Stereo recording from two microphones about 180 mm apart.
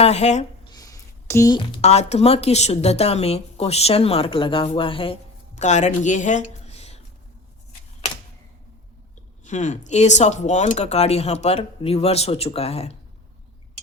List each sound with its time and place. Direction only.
0.0 s a sound: 35° left (ahead or behind)
0.7 s a woman's voice: 20° left (ahead or behind)
5.5 s speech: 40° left (ahead or behind)
9.4 s a woman's voice: 40° left (ahead or behind)